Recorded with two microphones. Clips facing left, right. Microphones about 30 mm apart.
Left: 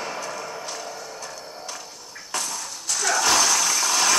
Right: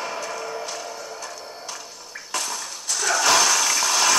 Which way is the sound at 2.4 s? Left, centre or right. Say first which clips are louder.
Right 1 dB; right.